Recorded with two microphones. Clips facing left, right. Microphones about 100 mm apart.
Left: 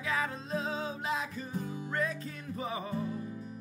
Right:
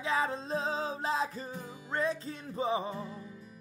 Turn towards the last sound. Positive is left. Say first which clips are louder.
# right 4 dB
turn(degrees=-25)  # may be behind; listen again after turning